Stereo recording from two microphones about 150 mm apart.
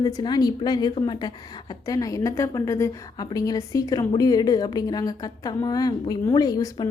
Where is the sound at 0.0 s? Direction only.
25° left (ahead or behind).